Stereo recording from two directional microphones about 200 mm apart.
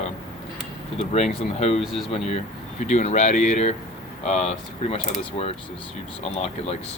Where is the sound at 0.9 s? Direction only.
35° left (ahead or behind).